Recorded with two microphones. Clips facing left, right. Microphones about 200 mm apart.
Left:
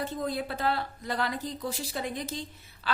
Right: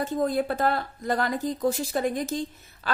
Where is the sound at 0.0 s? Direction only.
45° right (ahead or behind).